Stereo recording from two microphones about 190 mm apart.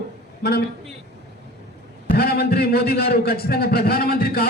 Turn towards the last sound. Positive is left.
turn(degrees=55)  # may be behind; listen again after turning